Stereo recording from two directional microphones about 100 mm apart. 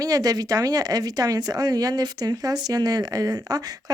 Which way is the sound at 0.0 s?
40° right (ahead or behind).